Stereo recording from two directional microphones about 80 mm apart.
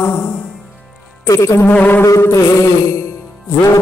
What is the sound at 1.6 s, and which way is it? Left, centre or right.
Music, left.